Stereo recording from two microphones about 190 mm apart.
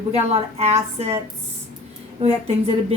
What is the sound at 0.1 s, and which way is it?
Speech, 35° right (ahead or behind).